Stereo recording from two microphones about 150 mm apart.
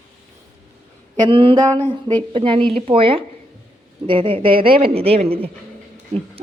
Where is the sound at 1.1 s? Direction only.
30° right (ahead or behind).